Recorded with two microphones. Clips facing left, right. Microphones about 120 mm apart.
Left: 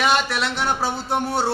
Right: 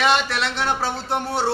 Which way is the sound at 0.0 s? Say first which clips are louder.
Even; 5° left (ahead or behind).